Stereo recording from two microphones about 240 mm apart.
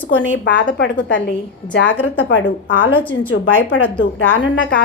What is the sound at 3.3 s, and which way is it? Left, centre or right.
Speech, left.